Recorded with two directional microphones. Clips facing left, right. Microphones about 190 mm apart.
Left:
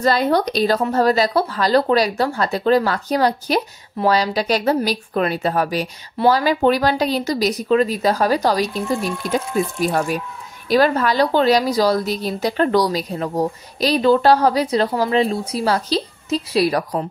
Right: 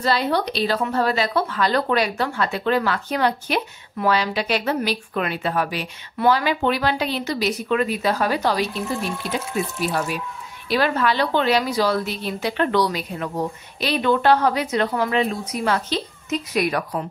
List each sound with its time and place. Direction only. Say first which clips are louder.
0.0 s speech: left 4 dB; 45° left (ahead or behind)